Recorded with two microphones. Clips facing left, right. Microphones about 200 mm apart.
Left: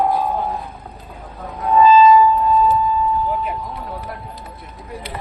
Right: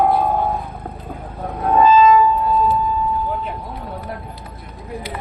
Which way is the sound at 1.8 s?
50° right (ahead or behind).